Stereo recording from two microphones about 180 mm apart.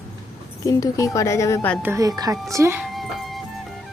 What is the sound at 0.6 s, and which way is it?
Speech, 20° left (ahead or behind).